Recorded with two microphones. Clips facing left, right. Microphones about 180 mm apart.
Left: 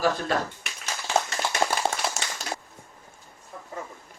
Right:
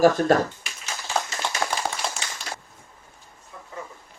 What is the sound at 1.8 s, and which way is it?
Tap, 25° left (ahead or behind).